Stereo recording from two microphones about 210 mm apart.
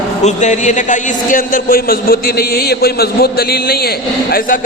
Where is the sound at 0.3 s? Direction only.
35° left (ahead or behind).